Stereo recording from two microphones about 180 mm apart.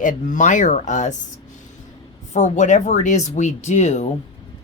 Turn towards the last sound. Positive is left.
turn(degrees=40)  # may be behind; listen again after turning